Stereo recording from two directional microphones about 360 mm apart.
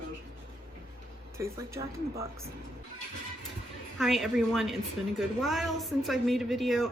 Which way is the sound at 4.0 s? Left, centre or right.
Centre.